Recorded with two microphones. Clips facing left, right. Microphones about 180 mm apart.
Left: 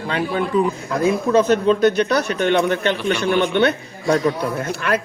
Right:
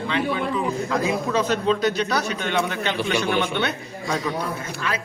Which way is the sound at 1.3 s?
50° left (ahead or behind).